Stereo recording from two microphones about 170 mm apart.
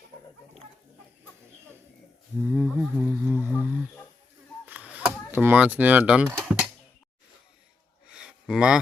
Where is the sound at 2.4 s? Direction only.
10° right (ahead or behind).